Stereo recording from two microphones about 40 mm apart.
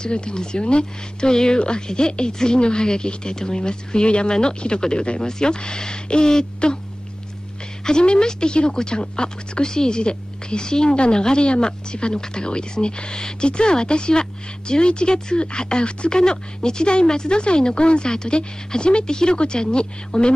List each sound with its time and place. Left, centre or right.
0.0 s speech: left
7.8 s speech: left